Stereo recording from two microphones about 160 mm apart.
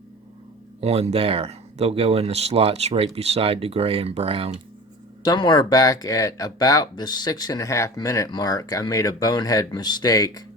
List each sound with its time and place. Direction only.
0.8 s speech: 40° right (ahead or behind)
5.2 s speech: 25° left (ahead or behind)